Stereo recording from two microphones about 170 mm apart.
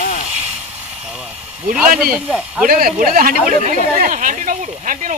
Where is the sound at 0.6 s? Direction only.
10° right (ahead or behind).